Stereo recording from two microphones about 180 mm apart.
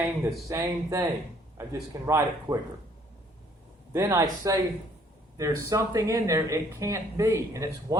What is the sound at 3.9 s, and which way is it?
Speech, 20° right (ahead or behind).